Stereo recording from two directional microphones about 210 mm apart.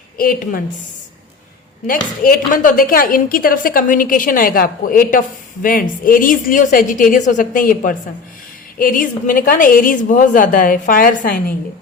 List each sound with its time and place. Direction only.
0.2 s speech: 45° left (ahead or behind)
1.9 s a woman's voice: 40° left (ahead or behind)